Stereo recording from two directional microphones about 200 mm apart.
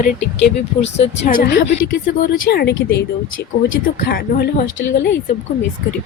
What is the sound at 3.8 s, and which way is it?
Speech, 50° left (ahead or behind).